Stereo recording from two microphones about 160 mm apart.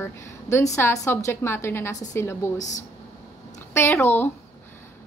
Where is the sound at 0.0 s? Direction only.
15° left (ahead or behind).